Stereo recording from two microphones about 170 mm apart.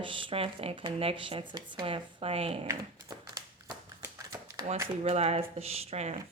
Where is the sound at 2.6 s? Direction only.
20° right (ahead or behind).